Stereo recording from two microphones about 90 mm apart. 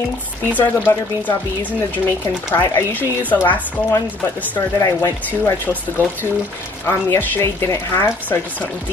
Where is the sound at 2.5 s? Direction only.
30° left (ahead or behind).